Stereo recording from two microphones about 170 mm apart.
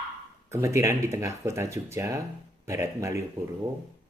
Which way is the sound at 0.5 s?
15° right (ahead or behind).